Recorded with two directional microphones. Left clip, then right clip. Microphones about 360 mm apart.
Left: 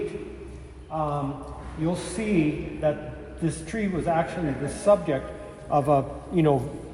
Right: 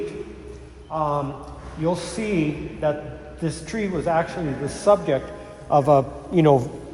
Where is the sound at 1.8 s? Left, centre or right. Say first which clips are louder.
Right 4 dB; centre.